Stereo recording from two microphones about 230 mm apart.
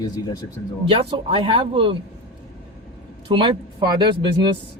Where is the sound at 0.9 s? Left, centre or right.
Right.